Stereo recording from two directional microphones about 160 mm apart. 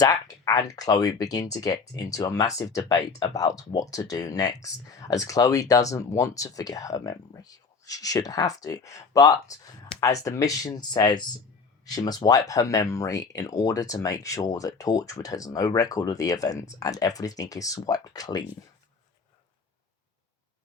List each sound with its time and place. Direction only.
0.0 s speech: 20° left (ahead or behind)